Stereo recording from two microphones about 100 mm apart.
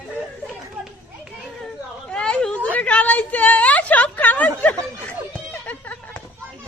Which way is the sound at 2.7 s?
15° left (ahead or behind).